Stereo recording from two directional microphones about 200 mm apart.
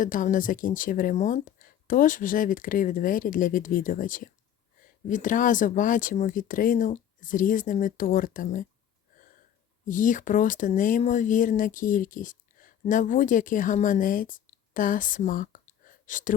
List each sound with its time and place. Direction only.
0.0 s speech: 40° left (ahead or behind)
9.8 s speech: 40° left (ahead or behind)